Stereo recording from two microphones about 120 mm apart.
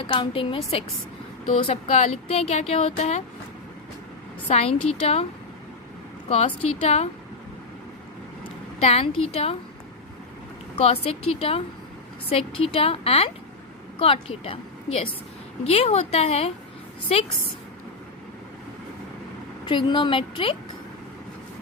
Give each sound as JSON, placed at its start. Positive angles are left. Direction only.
{"t": 0.1, "sound": "a woman's voice", "side_deg": 45}
{"t": 1.5, "sound": "speech", "side_deg": 60}
{"t": 4.4, "sound": "speech", "side_deg": 60}
{"t": 6.2, "sound": "speech", "side_deg": 55}
{"t": 8.8, "sound": "speech", "side_deg": 55}
{"t": 10.8, "sound": "a woman's voice", "side_deg": 55}
{"t": 19.6, "sound": "a woman's voice", "side_deg": 40}